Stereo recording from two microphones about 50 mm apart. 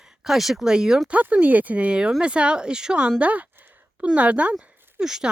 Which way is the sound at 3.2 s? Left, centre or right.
Right.